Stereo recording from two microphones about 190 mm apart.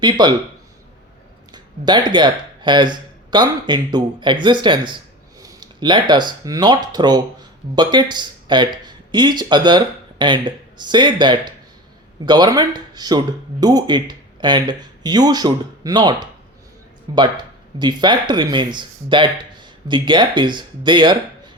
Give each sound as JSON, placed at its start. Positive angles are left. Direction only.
{"t": 0.0, "sound": "speech", "side_deg": -25}
{"t": 1.5, "sound": "speech", "side_deg": -25}